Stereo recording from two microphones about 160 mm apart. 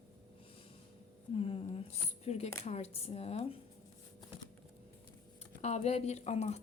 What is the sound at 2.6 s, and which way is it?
Speech, 40° left (ahead or behind).